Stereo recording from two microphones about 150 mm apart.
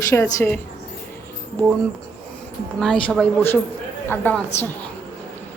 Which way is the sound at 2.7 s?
5° left (ahead or behind).